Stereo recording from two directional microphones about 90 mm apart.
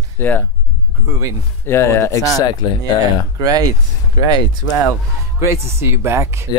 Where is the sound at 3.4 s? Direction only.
40° right (ahead or behind).